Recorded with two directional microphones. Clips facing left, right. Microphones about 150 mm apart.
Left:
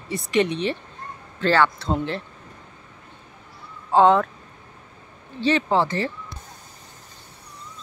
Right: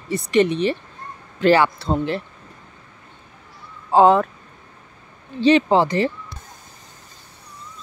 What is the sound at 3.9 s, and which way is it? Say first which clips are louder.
Speech: right 2 dB; 10° right (ahead or behind).